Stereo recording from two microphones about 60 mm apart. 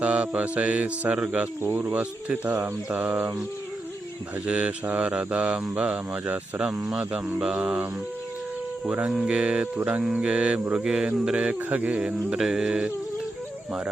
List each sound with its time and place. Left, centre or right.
0.0 s mantra: right
1.6 s speech: right
4.4 s mantra: centre
6.7 s speech: centre
7.4 s mantra: centre
8.9 s mantra: centre